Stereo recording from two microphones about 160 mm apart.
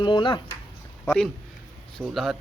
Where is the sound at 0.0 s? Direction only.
30° left (ahead or behind).